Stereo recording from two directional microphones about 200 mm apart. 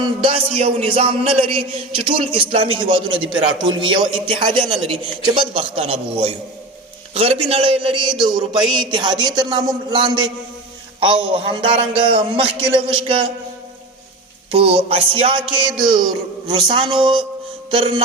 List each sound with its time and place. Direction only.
0.0 s a man's voice: 25° right (ahead or behind)
14.5 s a man's voice: 30° right (ahead or behind)